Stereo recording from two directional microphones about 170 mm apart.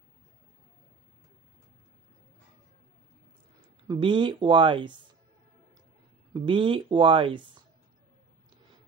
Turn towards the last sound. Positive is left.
turn(degrees=-30)  # may be behind; listen again after turning